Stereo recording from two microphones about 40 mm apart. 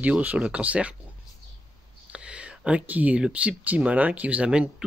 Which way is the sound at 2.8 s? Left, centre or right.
Right.